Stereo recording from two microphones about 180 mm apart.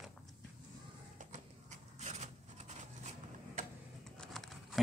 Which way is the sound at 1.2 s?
40° right (ahead or behind).